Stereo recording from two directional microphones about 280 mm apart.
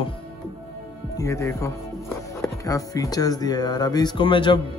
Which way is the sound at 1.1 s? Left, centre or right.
Centre.